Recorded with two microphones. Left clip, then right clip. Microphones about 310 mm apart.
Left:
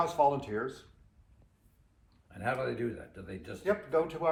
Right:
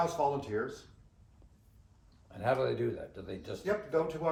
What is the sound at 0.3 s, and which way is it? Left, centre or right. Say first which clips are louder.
Speech: left 4 dB; centre.